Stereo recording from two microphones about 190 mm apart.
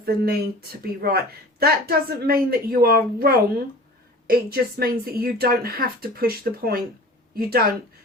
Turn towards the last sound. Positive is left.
turn(degrees=-55)  # may be behind; listen again after turning